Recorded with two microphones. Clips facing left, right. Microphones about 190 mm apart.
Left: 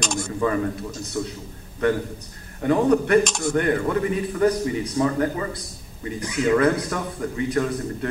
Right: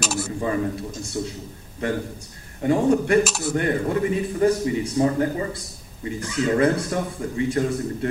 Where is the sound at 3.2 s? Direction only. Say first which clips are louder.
Even; 5° right (ahead or behind).